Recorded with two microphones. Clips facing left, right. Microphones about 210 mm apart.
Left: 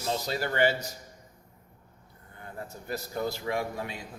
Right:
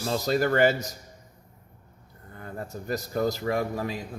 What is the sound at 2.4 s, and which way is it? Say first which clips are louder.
A man's voice: right 5 dB; 45° right (ahead or behind).